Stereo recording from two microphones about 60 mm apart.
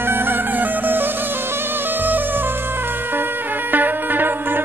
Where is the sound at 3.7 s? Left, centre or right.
Right.